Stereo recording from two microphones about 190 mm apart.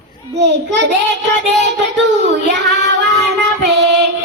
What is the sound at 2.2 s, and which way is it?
Child singing, 65° right (ahead or behind).